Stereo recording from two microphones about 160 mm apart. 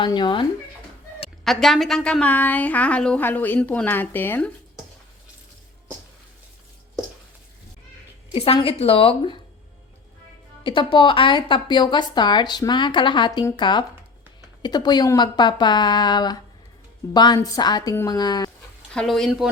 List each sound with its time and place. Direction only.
0.0 s a woman's voice: 30° left (ahead or behind)
1.5 s a woman's voice: centre (ahead or behind)
8.3 s a woman's voice: 35° left (ahead or behind)
10.6 s a woman's voice: 30° left (ahead or behind)
18.9 s speech: centre (ahead or behind)